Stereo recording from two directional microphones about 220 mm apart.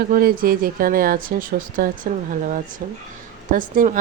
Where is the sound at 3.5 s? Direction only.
35° right (ahead or behind).